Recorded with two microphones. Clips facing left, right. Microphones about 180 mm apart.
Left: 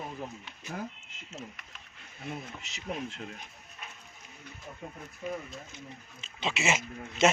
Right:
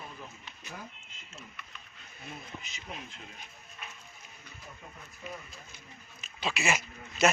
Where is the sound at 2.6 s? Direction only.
80° left.